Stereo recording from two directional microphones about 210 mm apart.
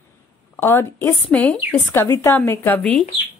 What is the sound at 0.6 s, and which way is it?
Speech, 10° left (ahead or behind).